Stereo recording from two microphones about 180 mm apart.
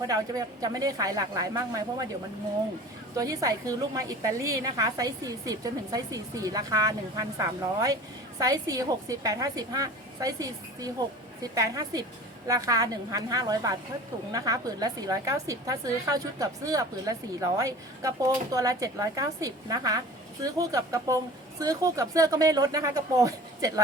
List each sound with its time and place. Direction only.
0.0 s a woman's voice: 20° right (ahead or behind)
3.2 s a woman's voice: 20° right (ahead or behind)